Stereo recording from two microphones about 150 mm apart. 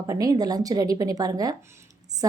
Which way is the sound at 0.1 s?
25° right (ahead or behind).